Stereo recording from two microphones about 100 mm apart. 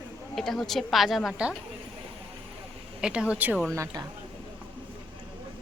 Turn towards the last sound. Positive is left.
turn(degrees=-35)  # may be behind; listen again after turning